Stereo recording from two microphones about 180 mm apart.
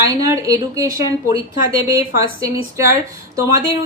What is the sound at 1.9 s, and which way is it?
Speech, 15° right (ahead or behind).